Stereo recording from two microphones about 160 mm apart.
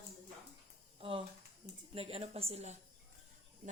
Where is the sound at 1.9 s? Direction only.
35° right (ahead or behind).